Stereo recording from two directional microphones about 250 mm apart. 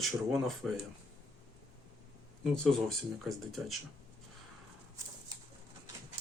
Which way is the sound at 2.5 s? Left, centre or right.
Centre.